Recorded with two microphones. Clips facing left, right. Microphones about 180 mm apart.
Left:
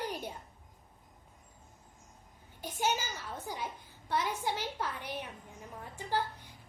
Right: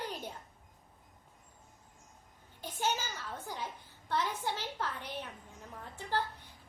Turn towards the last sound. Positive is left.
turn(degrees=10)  # may be behind; listen again after turning